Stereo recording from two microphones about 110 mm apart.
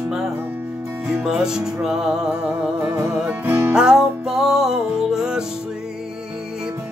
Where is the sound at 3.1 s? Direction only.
15° right (ahead or behind).